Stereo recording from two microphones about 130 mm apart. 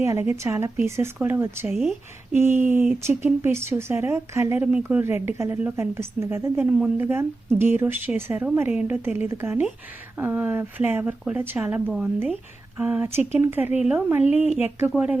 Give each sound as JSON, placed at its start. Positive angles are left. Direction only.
{"t": 0.0, "sound": "a woman's voice", "side_deg": -20}
{"t": 1.7, "sound": "speech", "side_deg": -5}
{"t": 2.3, "sound": "a woman's voice", "side_deg": -15}